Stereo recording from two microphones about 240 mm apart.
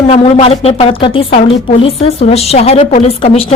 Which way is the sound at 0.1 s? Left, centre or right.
Left.